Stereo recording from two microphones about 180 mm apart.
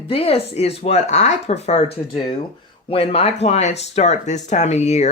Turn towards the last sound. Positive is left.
turn(degrees=40)  # may be behind; listen again after turning